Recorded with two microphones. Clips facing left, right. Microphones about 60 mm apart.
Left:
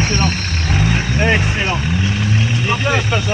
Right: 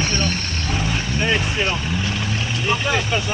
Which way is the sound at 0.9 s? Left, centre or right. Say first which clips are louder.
Left 4 dB; left.